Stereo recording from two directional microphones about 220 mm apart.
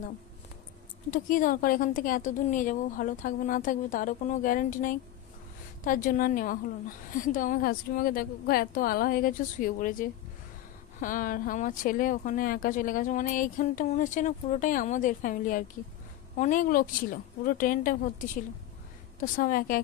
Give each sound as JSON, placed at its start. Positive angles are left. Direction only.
{"t": 1.1, "sound": "speech", "side_deg": 40}
{"t": 6.0, "sound": "speech", "side_deg": 40}
{"t": 19.1, "sound": "speech", "side_deg": 40}